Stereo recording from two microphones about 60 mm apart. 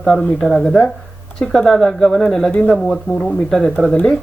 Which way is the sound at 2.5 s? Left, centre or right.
Left.